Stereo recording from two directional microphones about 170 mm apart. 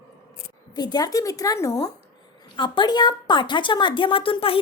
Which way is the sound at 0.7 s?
25° left (ahead or behind).